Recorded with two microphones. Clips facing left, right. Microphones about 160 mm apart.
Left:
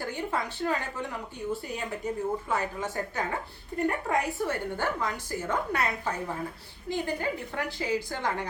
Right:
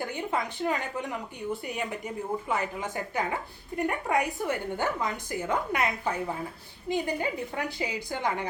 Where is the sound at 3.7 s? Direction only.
15° right (ahead or behind).